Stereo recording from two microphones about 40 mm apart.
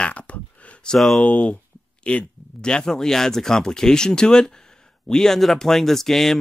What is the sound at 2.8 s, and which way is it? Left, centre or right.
Speech, centre.